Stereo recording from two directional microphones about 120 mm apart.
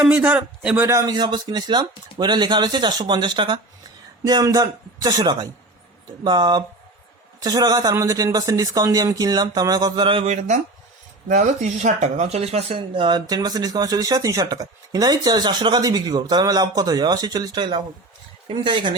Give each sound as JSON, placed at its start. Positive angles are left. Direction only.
{"t": 0.0, "sound": "a man's voice", "side_deg": -10}
{"t": 0.9, "sound": "a man's voice", "side_deg": -25}
{"t": 1.1, "sound": "speech", "side_deg": -40}
{"t": 4.2, "sound": "speech", "side_deg": -30}
{"t": 10.0, "sound": "speech", "side_deg": -50}
{"t": 10.2, "sound": "speech", "side_deg": -75}
{"t": 11.3, "sound": "speech", "side_deg": -85}